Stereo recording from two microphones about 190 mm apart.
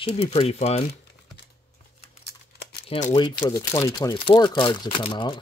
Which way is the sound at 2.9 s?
40° left (ahead or behind).